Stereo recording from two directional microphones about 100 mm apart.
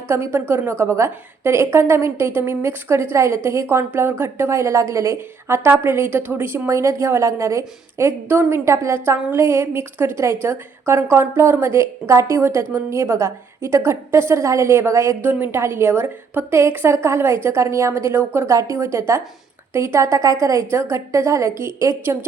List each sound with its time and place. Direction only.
0.1 s a woman's voice: 25° right (ahead or behind)